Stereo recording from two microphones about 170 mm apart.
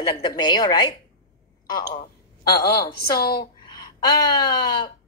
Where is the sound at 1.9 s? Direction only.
25° left (ahead or behind).